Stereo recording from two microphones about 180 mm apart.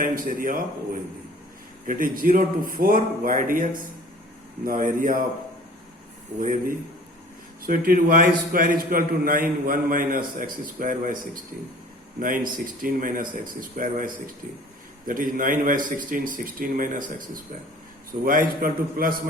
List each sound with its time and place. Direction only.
0.0 s a man's voice: 50° right (ahead or behind)
1.9 s a man's voice: 50° right (ahead or behind)
4.6 s a man's voice: 50° right (ahead or behind)
6.4 s a man's voice: 50° right (ahead or behind)